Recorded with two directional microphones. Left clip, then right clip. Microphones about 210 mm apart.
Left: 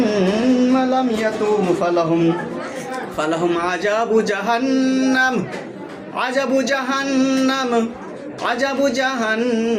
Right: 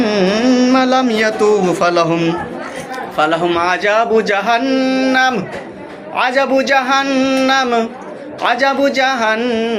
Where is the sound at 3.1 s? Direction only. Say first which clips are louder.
Right 6 dB; centre (ahead or behind).